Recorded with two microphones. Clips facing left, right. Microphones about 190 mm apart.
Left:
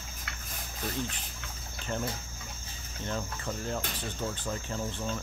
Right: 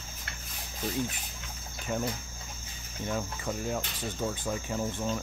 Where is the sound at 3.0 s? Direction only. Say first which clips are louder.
Right 2 dB; 10° right (ahead or behind).